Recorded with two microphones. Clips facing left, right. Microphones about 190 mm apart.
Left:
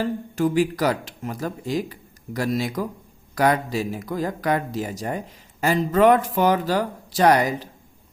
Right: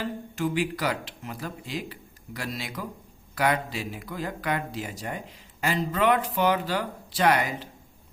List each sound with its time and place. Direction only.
0.0 s speech: 45° left (ahead or behind)